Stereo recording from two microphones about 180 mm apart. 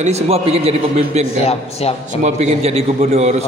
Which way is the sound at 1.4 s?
35° left (ahead or behind).